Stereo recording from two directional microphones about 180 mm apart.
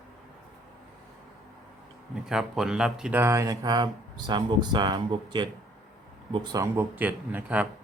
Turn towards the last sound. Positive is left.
turn(degrees=-10)  # may be behind; listen again after turning